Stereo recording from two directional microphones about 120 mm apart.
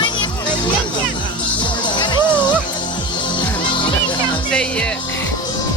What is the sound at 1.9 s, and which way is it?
Music, 40° left (ahead or behind).